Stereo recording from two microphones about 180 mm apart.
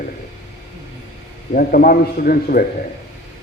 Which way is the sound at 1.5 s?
50° left (ahead or behind).